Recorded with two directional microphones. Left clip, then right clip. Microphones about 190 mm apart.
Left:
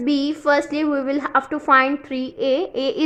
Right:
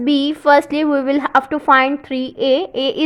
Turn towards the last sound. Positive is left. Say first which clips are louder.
# right 4 dB
turn(degrees=-25)  # may be behind; listen again after turning